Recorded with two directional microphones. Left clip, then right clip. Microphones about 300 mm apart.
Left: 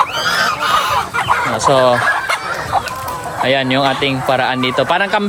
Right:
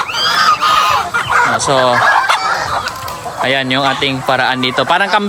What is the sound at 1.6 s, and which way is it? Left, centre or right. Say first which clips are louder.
Speech: left 1 dB; centre.